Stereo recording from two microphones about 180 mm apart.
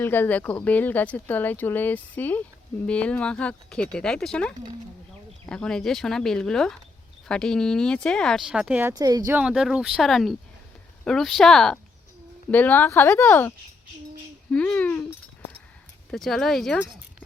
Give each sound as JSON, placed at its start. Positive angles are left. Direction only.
{"t": 0.0, "sound": "speech", "side_deg": 10}
{"t": 9.4, "sound": "speech", "side_deg": -5}
{"t": 14.5, "sound": "speech", "side_deg": 5}
{"t": 16.1, "sound": "speech", "side_deg": 0}